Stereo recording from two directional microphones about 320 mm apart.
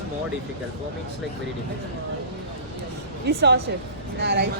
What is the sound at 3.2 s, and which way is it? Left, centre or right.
Speech, right.